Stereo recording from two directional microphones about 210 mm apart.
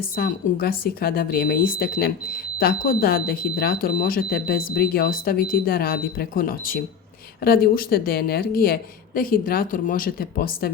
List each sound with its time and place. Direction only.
0.2 s speech: 45° left (ahead or behind)